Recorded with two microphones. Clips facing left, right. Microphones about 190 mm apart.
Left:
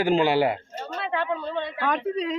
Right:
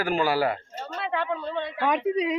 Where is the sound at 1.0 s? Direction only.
Centre (ahead or behind).